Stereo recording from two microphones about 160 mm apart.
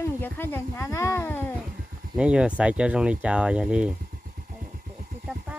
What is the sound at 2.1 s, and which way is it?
Speech, 5° right (ahead or behind).